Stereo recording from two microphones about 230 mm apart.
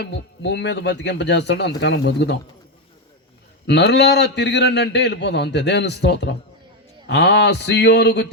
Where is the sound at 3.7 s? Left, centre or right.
Left.